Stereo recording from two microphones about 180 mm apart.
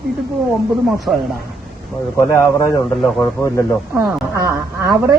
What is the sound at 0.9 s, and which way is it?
Speech, centre (ahead or behind).